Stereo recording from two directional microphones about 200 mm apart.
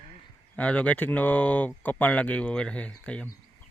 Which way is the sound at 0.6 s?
5° left (ahead or behind).